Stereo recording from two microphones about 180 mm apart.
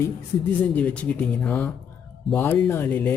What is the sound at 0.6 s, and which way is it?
Speech, 5° left (ahead or behind).